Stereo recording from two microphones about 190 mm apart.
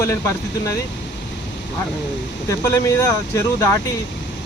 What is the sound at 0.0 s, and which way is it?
Speech, 15° left (ahead or behind).